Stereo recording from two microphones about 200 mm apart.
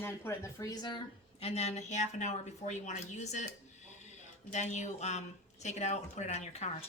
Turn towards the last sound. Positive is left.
turn(degrees=35)  # may be behind; listen again after turning